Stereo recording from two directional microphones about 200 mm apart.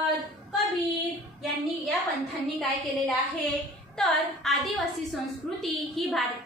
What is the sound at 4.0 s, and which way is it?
A woman's voice, centre (ahead or behind).